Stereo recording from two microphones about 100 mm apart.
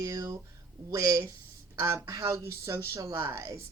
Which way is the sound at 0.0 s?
35° right (ahead or behind).